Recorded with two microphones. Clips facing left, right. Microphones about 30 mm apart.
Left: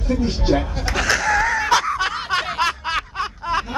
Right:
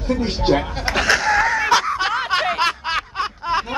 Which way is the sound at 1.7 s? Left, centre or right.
Centre.